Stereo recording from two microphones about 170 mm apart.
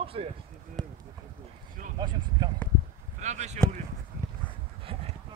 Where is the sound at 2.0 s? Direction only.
25° right (ahead or behind).